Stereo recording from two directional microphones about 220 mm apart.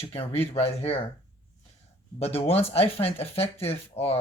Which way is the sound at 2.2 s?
25° left (ahead or behind).